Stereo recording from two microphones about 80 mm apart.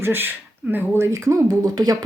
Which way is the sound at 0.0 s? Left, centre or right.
Right.